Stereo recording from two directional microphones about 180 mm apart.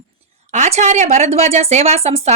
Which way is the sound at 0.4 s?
40° right (ahead or behind).